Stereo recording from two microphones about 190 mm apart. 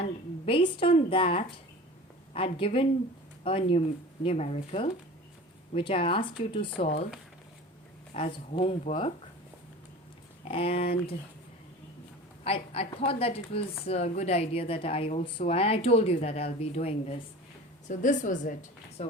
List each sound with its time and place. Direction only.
0.0 s a woman's voice: 30° left (ahead or behind)
8.1 s a woman's voice: 30° left (ahead or behind)
10.5 s speech: 30° left (ahead or behind)
12.5 s a woman's voice: 30° left (ahead or behind)